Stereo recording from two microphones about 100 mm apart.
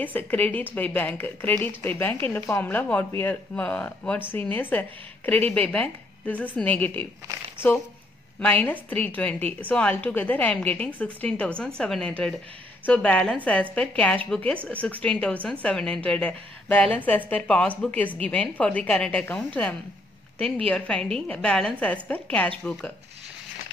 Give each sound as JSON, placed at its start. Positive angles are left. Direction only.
{"t": 0.0, "sound": "a woman's voice", "side_deg": 15}